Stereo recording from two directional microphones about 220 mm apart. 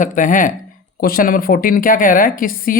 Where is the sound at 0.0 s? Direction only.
35° left (ahead or behind).